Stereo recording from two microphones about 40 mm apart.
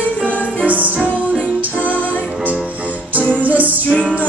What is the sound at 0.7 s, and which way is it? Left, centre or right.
Music, right.